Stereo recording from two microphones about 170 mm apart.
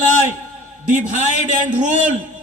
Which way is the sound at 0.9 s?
45° right (ahead or behind).